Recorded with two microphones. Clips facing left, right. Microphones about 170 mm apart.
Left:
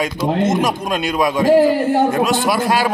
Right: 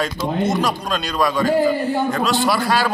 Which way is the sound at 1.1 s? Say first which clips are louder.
Left 1 dB; 20° left (ahead or behind).